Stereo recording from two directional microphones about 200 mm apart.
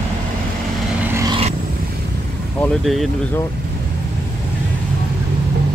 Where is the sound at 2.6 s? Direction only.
Centre (ahead or behind).